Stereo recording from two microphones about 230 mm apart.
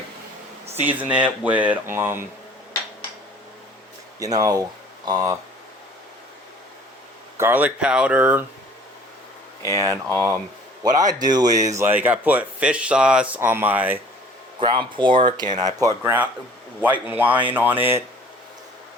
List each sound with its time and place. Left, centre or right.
0.8 s speech: centre
4.2 s speech: centre
7.3 s speech: centre
10.8 s speech: centre
14.6 s speech: centre